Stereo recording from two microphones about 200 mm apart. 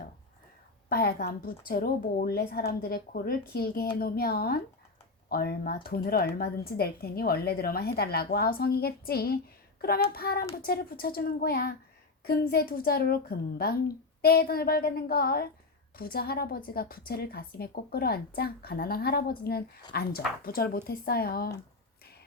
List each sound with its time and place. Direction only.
0.9 s a woman's voice: 50° left (ahead or behind)